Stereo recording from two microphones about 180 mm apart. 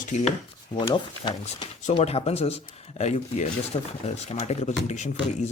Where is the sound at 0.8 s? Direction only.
25° left (ahead or behind).